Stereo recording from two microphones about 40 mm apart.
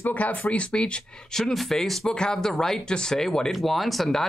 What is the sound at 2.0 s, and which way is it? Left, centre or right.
Speech, left.